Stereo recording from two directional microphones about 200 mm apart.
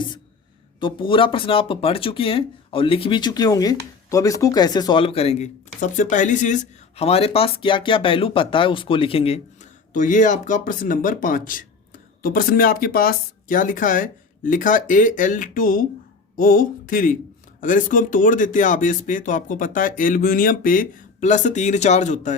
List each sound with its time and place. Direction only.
0.8 s speech: 25° left (ahead or behind)